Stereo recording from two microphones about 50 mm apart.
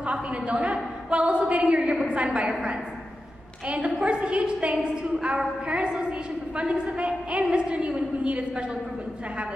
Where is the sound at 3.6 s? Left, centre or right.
Right.